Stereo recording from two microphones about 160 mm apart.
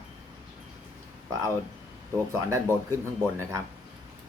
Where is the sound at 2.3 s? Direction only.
20° right (ahead or behind).